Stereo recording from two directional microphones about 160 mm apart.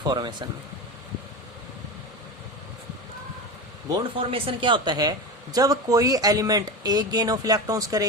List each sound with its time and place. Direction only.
0.0 s speech: 25° right (ahead or behind)
4.2 s speech: 35° right (ahead or behind)